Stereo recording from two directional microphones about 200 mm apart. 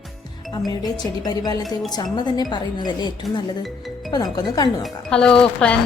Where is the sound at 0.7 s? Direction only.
20° left (ahead or behind).